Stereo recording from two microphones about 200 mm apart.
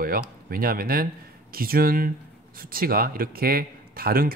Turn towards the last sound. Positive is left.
turn(degrees=-45)  # may be behind; listen again after turning